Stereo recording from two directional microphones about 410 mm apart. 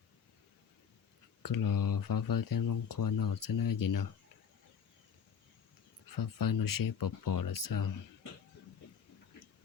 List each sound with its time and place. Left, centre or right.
1.4 s speech: left
6.1 s speech: left